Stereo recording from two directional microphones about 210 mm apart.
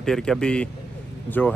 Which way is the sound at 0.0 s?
5° left (ahead or behind).